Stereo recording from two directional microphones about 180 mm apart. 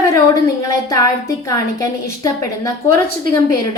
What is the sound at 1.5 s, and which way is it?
A woman's voice, 20° left (ahead or behind).